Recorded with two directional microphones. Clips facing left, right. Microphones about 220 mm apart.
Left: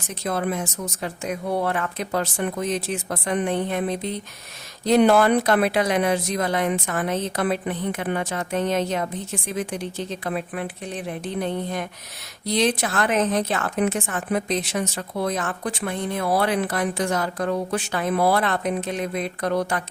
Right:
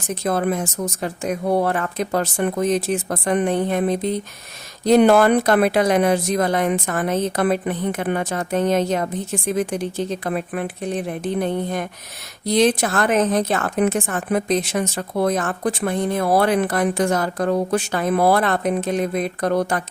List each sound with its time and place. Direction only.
0.1 s a woman's voice: 45° right (ahead or behind)